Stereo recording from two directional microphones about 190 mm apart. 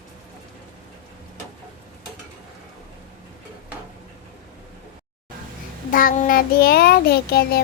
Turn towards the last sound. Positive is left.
turn(degrees=55)  # may be behind; listen again after turning